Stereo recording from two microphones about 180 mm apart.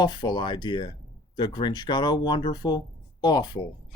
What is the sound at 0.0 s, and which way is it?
Speech, 25° left (ahead or behind).